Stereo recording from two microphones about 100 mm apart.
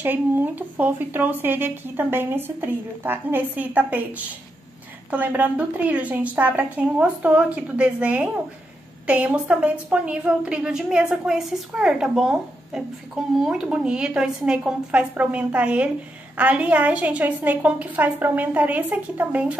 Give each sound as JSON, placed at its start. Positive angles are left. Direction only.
{"t": 0.0, "sound": "a woman's voice", "side_deg": -20}